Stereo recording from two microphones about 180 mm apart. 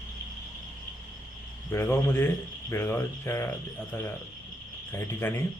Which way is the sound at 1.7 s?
15° left (ahead or behind).